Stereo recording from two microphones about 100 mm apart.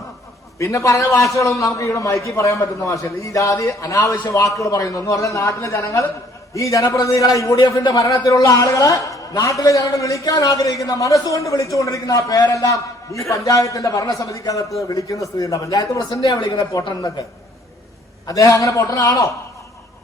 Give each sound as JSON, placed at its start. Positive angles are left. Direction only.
{"t": 0.6, "sound": "a woman's voice", "side_deg": 30}
{"t": 7.5, "sound": "a woman's voice", "side_deg": 45}
{"t": 18.3, "sound": "a woman's voice", "side_deg": 35}